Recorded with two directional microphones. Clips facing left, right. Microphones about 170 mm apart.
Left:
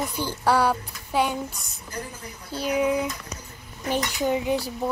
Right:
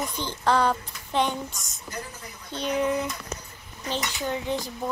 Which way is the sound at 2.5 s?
5° left (ahead or behind).